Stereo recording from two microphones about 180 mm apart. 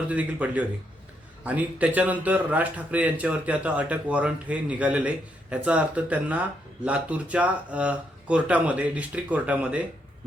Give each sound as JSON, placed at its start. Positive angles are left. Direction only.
{"t": 0.1, "sound": "speech", "side_deg": -10}